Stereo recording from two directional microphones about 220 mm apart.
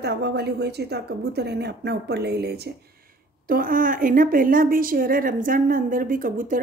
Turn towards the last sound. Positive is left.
turn(degrees=-40)  # may be behind; listen again after turning